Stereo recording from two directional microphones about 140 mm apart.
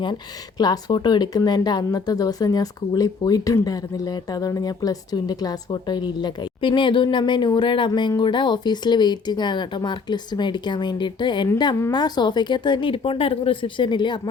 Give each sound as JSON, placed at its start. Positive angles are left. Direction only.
{"t": 0.6, "sound": "speech", "side_deg": 30}